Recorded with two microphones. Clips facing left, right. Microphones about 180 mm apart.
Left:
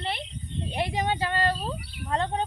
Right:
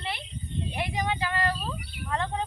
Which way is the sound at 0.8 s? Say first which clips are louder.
Left 3 dB; 30° left (ahead or behind).